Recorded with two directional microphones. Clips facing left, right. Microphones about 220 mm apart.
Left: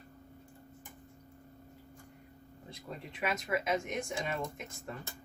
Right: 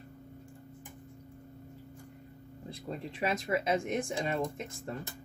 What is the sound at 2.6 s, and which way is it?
Speech, 30° right (ahead or behind).